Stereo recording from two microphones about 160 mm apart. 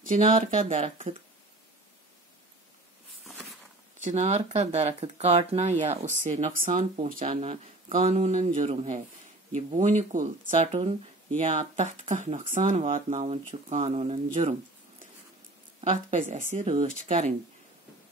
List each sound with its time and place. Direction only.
0.1 s speech: 45° right (ahead or behind)
3.3 s a sound: centre (ahead or behind)
4.0 s speech: 45° right (ahead or behind)
15.8 s speech: 50° right (ahead or behind)